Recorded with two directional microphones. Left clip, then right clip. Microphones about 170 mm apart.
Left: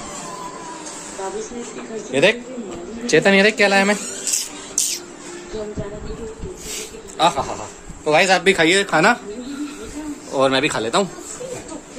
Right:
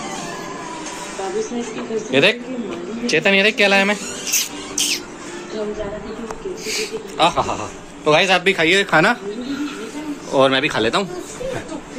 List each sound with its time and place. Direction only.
2.1 s speech: 15° left (ahead or behind)
3.1 s a woman's voice: 30° left (ahead or behind)
4.8 s music: 25° left (ahead or behind)
7.2 s a woman's voice: 20° left (ahead or behind)
10.3 s speech: 10° left (ahead or behind)